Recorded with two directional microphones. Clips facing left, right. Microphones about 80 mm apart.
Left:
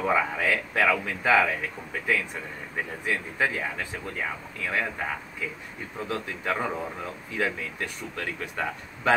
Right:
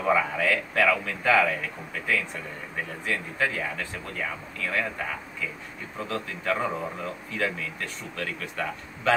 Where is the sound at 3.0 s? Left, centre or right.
Centre.